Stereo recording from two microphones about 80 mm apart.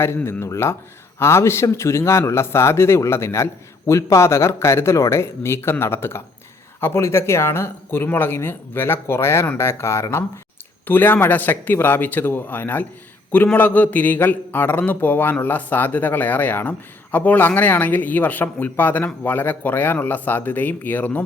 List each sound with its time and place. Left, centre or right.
0.3 s a man's voice: left; by 21.2 s centre